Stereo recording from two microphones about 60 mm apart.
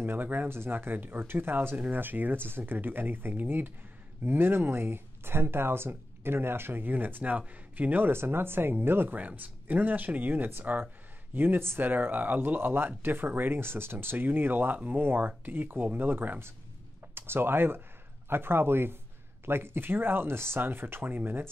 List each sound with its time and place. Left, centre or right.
0.0 s speech: right